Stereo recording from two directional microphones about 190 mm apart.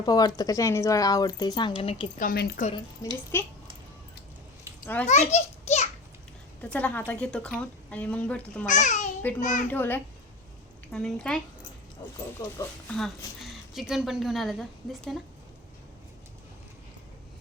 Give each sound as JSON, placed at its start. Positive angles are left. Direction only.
{"t": 0.0, "sound": "speech", "side_deg": 20}
{"t": 2.1, "sound": "a woman's voice", "side_deg": 50}
{"t": 3.0, "sound": "a woman's voice", "side_deg": 15}
{"t": 5.0, "sound": "children playing", "side_deg": 35}
{"t": 6.6, "sound": "a woman's voice", "side_deg": 5}
{"t": 8.6, "sound": "a child's voice", "side_deg": 40}
{"t": 9.6, "sound": "a woman's voice", "side_deg": 10}
{"t": 12.4, "sound": "speech", "side_deg": 20}
{"t": 12.9, "sound": "speech", "side_deg": 0}